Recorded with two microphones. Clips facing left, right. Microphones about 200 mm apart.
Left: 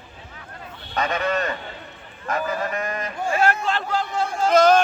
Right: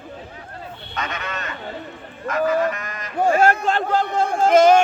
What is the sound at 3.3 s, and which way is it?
Speech, 45° right (ahead or behind).